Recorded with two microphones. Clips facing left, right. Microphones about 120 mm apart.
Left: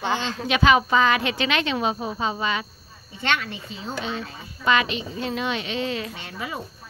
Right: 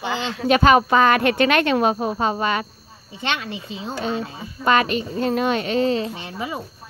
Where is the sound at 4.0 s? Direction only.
45° right (ahead or behind); by 6.6 s 25° right (ahead or behind).